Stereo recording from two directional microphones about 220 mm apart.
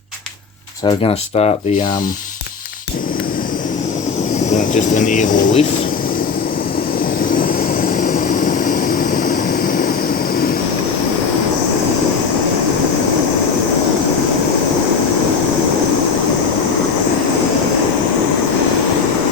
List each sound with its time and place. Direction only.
0.9 s speech: 25° left (ahead or behind)
4.5 s speech: 35° left (ahead or behind)
8.6 s vehicle: 40° left (ahead or behind)